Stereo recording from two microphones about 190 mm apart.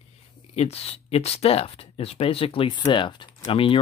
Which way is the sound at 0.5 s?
30° left (ahead or behind).